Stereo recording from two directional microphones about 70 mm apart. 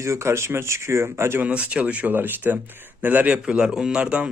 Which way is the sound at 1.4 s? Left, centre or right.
Centre.